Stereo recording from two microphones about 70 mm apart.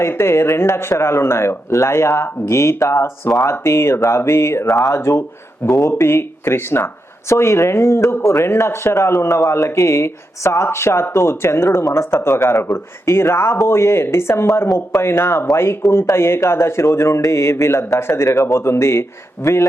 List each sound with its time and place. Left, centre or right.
0.0 s speech: left